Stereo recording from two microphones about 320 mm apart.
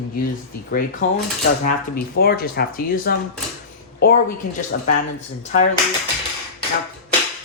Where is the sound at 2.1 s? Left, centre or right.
Left.